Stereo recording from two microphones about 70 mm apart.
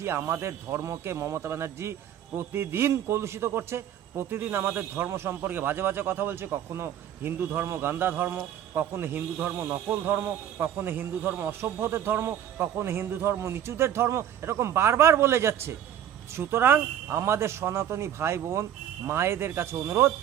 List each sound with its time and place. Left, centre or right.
0.0 s speech: right
11.6 s speech: right